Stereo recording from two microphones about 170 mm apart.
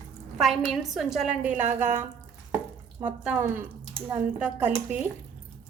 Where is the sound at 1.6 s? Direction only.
45° right (ahead or behind).